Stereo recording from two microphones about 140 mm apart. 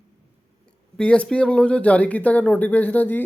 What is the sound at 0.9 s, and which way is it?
Speech, 10° left (ahead or behind).